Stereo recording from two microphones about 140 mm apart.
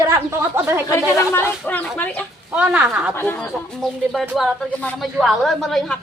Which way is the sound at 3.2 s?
10° left (ahead or behind).